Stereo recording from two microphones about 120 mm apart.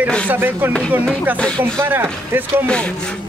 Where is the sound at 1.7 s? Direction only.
20° right (ahead or behind).